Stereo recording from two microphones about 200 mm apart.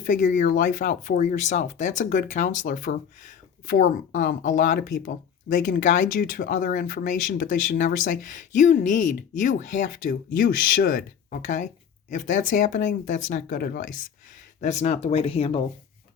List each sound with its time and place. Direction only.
0.0 s speech: 40° left (ahead or behind)